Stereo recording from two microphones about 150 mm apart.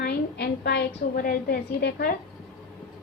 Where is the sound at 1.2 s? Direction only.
80° left.